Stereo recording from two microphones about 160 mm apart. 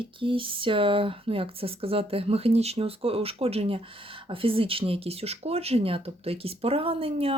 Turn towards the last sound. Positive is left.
turn(degrees=-35)  # may be behind; listen again after turning